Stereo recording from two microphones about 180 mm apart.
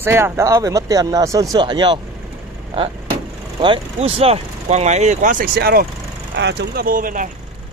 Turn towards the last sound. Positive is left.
turn(degrees=-50)  # may be behind; listen again after turning